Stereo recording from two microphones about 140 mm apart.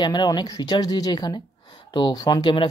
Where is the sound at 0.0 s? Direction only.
30° left (ahead or behind).